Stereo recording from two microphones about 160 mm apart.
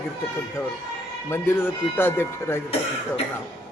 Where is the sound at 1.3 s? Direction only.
15° left (ahead or behind).